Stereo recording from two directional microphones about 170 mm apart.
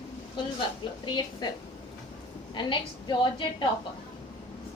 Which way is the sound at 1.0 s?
25° left (ahead or behind).